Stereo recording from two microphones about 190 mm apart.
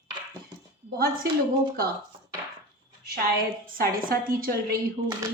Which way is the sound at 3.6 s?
50° right (ahead or behind).